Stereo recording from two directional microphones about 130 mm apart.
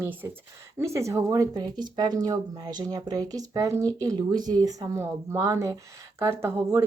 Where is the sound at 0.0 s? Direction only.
15° right (ahead or behind).